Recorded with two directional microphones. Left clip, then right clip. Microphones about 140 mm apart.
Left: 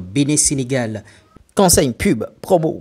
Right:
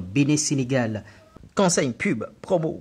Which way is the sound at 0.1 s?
25° left (ahead or behind).